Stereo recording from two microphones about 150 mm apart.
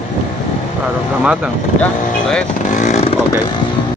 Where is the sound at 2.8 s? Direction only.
50° left (ahead or behind).